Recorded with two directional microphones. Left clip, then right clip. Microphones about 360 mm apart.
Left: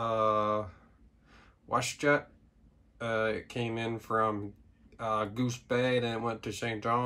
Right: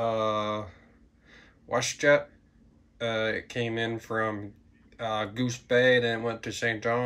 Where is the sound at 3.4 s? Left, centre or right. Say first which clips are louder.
Right 5 dB; centre.